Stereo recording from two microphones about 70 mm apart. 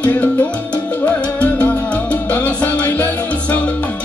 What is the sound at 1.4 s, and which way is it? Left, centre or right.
Music, left.